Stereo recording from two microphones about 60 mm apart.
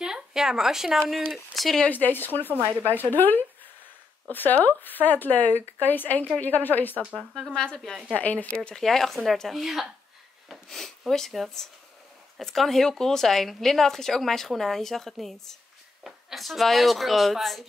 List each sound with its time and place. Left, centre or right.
0.0 s a sound: centre
1.3 s speech: centre
1.9 s speech: left
7.2 s speech: centre
7.5 s a woman's voice: centre
8.2 s speech: left
8.5 s a woman's voice: centre
8.8 s speech: centre